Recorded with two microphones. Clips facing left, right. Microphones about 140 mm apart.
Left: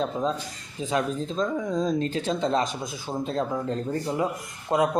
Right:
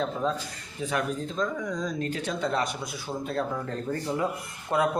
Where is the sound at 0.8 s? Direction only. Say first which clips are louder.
Left 3 dB; 25° left (ahead or behind).